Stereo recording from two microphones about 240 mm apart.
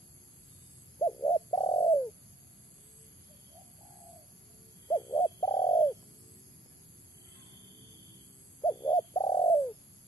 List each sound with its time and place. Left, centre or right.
0.9 s bird: centre
4.8 s bird: centre
8.6 s bird: centre